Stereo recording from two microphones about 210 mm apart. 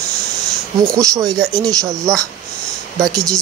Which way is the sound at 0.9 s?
15° right (ahead or behind).